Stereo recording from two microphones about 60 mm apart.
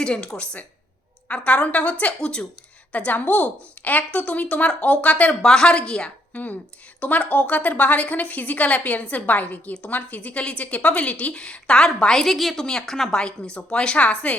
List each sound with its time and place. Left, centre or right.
0.0 s a woman's voice: centre
2.9 s a woman's voice: left
5.3 s a woman's voice: centre
6.3 s a woman's voice: left